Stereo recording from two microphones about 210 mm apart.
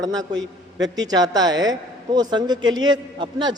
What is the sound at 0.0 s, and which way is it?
A man's voice, 20° right (ahead or behind).